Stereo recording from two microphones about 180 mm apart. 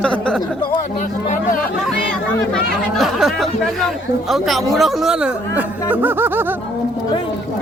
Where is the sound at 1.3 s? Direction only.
50° left (ahead or behind).